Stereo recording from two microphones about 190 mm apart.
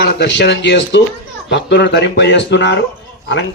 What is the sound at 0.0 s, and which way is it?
A man's voice, 65° left (ahead or behind).